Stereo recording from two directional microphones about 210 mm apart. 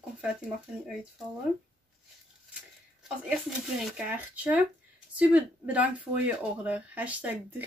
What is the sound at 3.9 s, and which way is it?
Speech, 5° right (ahead or behind).